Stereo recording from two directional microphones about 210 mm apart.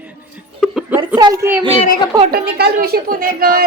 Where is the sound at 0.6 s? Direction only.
5° right (ahead or behind).